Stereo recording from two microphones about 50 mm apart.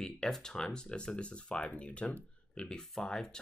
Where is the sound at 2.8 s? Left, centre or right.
Centre.